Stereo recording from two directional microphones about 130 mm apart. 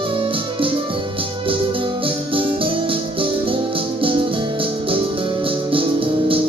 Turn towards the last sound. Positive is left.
turn(degrees=-45)  # may be behind; listen again after turning